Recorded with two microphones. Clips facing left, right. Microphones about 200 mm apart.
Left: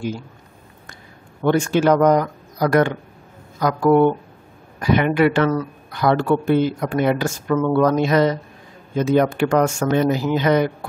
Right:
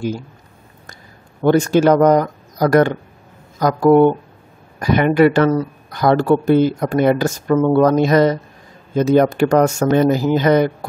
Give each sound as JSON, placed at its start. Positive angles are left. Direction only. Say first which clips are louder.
{"t": 1.4, "sound": "speech", "louder": "right 4 dB", "side_deg": -40}